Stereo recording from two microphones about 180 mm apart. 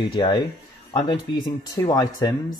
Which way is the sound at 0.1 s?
25° left (ahead or behind).